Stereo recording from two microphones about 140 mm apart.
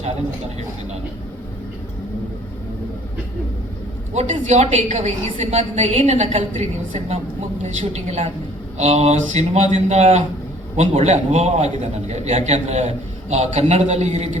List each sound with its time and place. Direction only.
4.1 s a woman's voice: 55° right (ahead or behind)